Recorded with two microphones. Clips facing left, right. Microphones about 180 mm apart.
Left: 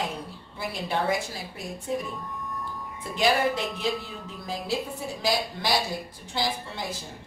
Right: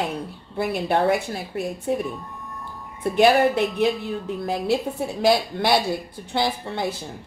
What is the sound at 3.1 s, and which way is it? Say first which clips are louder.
A woman's voice: right 7 dB; 60° right (ahead or behind).